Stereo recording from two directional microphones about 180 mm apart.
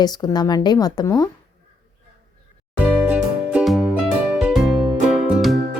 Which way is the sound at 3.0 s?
5° right (ahead or behind).